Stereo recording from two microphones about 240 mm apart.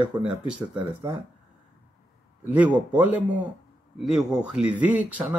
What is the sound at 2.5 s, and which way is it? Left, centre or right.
Speech, centre.